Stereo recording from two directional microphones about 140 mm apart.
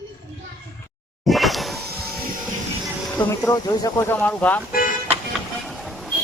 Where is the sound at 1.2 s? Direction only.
Centre (ahead or behind).